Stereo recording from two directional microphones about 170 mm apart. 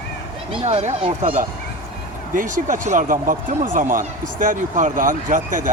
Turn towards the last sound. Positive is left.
turn(degrees=-50)  # may be behind; listen again after turning